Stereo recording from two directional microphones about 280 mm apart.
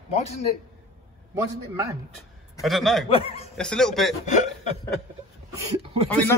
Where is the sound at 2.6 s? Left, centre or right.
Centre.